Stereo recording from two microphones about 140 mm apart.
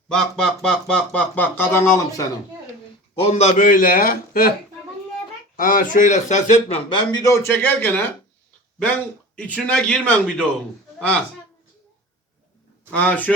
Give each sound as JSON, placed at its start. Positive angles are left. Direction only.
{"t": 0.1, "sound": "speech", "side_deg": 5}
{"t": 3.2, "sound": "a man's voice", "side_deg": 50}
{"t": 3.6, "sound": "speech", "side_deg": 85}
{"t": 5.5, "sound": "speech", "side_deg": 85}
{"t": 6.9, "sound": "speech", "side_deg": 30}
{"t": 12.9, "sound": "speech", "side_deg": 10}